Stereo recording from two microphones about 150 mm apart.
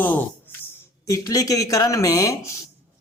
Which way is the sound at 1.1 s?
25° left (ahead or behind).